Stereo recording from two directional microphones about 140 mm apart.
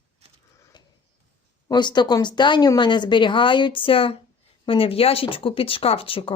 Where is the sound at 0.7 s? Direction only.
35° left (ahead or behind).